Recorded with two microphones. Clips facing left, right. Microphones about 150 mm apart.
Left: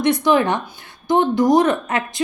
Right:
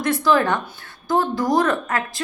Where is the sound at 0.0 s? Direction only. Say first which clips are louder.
Left 2 dB; 20° left (ahead or behind).